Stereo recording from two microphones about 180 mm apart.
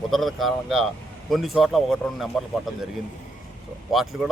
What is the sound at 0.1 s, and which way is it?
Speech, centre (ahead or behind).